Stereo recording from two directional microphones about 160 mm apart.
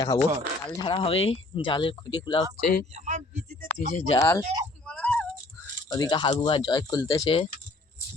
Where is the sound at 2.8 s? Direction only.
50° right (ahead or behind).